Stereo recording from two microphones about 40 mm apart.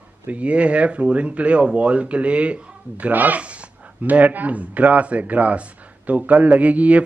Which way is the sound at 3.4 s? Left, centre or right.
Right.